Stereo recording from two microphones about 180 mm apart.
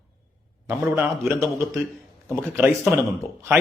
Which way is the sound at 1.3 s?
15° right (ahead or behind).